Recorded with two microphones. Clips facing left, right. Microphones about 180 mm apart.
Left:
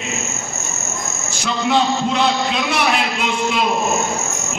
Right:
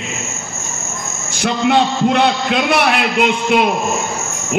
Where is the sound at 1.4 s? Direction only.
60° right (ahead or behind).